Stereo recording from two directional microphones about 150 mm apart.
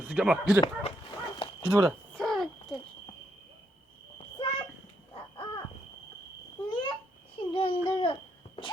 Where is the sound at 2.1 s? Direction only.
Centre (ahead or behind).